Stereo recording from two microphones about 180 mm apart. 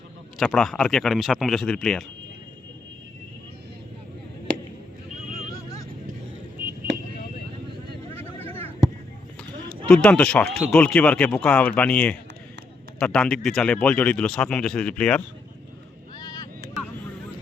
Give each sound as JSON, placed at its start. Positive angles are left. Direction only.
{"t": 0.3, "sound": "speech", "side_deg": 0}
{"t": 8.4, "sound": "a sound", "side_deg": 10}
{"t": 9.6, "sound": "speech", "side_deg": 5}
{"t": 16.1, "sound": "vehicle", "side_deg": 20}